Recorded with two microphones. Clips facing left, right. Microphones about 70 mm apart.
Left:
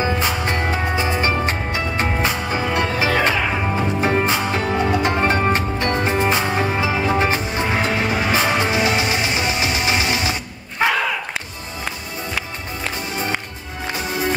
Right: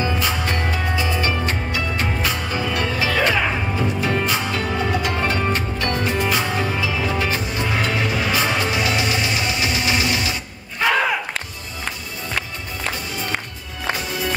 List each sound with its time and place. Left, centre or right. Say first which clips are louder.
0.0 s music: left 2 dB; left
13.9 s music: left 3 dB; left